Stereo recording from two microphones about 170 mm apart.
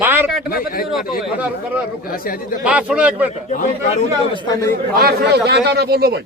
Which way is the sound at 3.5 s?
45° left (ahead or behind).